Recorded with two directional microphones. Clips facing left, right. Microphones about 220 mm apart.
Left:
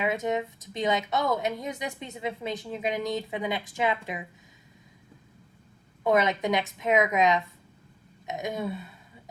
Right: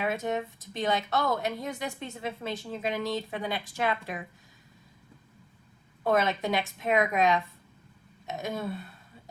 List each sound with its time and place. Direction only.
0.0 s a woman's voice: 20° left (ahead or behind)
6.1 s a woman's voice: 20° left (ahead or behind)